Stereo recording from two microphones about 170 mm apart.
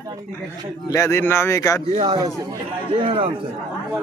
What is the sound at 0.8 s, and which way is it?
Speech, 20° left (ahead or behind).